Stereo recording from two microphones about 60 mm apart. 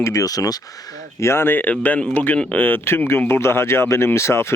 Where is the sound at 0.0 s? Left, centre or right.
Left.